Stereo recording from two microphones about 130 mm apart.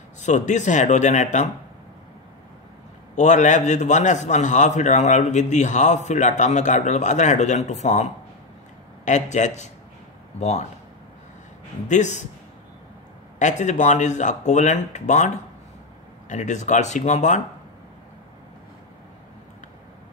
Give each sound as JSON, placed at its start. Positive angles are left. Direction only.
{"t": 0.2, "sound": "a man's voice", "side_deg": 65}
{"t": 3.2, "sound": "a man's voice", "side_deg": 65}
{"t": 11.9, "sound": "a man's voice", "side_deg": 65}
{"t": 13.4, "sound": "a man's voice", "side_deg": 65}